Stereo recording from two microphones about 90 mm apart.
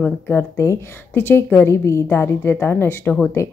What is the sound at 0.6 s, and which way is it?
A woman's voice, 35° left (ahead or behind).